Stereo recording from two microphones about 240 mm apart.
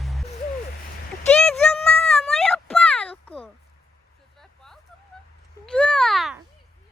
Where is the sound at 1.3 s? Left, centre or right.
Centre.